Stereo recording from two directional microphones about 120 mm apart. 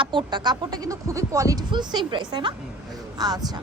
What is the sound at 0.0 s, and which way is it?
Speech, 40° right (ahead or behind).